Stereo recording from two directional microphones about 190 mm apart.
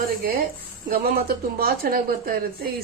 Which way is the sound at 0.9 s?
50° right (ahead or behind).